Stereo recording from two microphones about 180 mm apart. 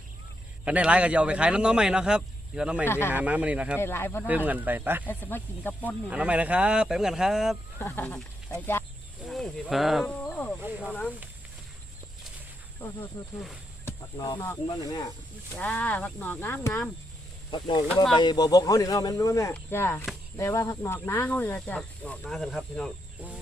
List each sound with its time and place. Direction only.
0.6 s a man's voice: 5° right (ahead or behind)
2.8 s speech: 15° left (ahead or behind)
3.1 s speech: 10° right (ahead or behind)
3.8 s speech: 15° left (ahead or behind)
4.3 s speech: 10° right (ahead or behind)
5.0 s speech: 10° left (ahead or behind)
6.1 s a man's voice: 5° right (ahead or behind)
7.8 s speech: 10° left (ahead or behind)
10.2 s a sound: 10° left (ahead or behind)
10.6 s speech: 5° right (ahead or behind)
12.8 s speech: 15° left (ahead or behind)
15.5 s speech: 10° left (ahead or behind)
17.5 s speech: 30° left (ahead or behind); by 22.9 s 5° left (ahead or behind)